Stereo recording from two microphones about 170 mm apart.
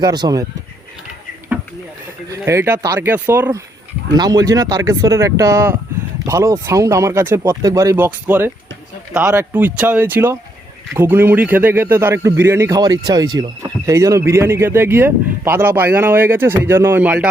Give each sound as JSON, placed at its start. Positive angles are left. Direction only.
{"t": 0.0, "sound": "speech", "side_deg": -25}
{"t": 2.4, "sound": "speech", "side_deg": -15}